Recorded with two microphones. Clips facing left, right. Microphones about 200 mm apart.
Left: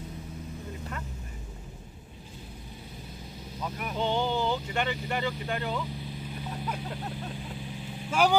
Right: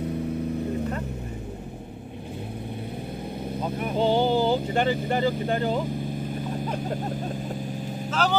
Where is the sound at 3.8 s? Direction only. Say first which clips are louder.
Right 7 dB; 30° right (ahead or behind).